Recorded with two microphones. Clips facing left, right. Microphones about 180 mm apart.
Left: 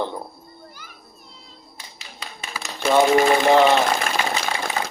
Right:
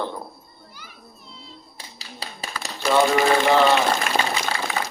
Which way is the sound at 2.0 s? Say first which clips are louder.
Right 3 dB; 35° right (ahead or behind).